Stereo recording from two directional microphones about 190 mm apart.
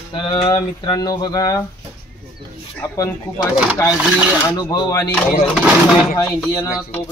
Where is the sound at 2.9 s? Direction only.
20° left (ahead or behind).